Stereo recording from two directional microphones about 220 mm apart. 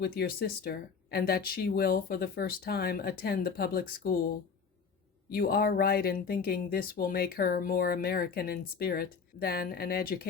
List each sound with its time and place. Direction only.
0.0 s speech: 45° left (ahead or behind)